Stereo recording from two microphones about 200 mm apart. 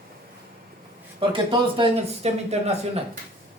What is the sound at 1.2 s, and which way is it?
Speech, 25° right (ahead or behind).